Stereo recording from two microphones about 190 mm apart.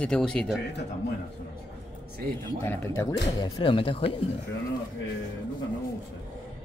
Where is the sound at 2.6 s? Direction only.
15° left (ahead or behind).